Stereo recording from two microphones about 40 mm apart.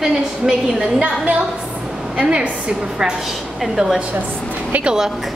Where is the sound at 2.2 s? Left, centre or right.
Right.